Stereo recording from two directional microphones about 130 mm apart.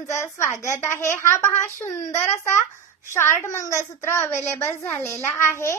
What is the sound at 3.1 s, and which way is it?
A child's voice, 20° left (ahead or behind).